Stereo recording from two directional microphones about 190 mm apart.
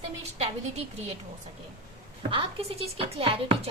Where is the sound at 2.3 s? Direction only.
30° right (ahead or behind).